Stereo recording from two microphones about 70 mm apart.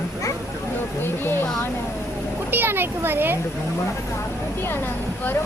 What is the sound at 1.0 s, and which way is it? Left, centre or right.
Speech, left.